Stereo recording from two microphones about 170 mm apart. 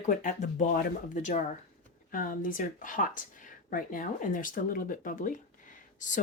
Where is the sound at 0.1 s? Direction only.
50° left (ahead or behind).